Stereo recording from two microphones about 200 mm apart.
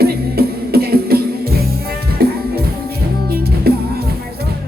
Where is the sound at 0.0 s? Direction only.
50° right (ahead or behind).